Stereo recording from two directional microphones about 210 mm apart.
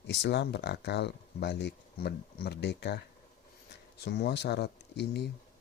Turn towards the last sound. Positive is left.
turn(degrees=55)  # may be behind; listen again after turning